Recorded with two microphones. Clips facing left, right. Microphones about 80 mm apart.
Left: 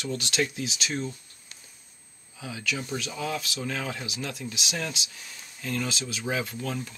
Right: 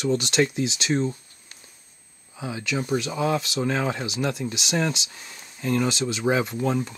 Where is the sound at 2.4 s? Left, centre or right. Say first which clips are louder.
Right 5 dB; right.